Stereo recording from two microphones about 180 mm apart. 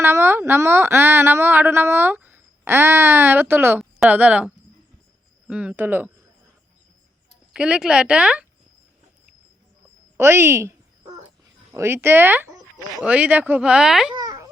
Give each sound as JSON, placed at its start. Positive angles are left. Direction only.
{"t": 0.0, "sound": "speech", "side_deg": -15}
{"t": 7.5, "sound": "a woman's voice", "side_deg": -5}
{"t": 10.2, "sound": "a sound", "side_deg": -15}
{"t": 11.7, "sound": "speech", "side_deg": -15}
{"t": 14.1, "sound": "babbling", "side_deg": -20}